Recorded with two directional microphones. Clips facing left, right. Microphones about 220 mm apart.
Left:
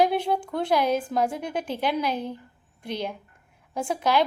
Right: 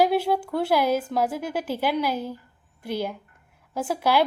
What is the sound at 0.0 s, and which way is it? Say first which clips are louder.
A woman's voice: right 2 dB; 5° right (ahead or behind).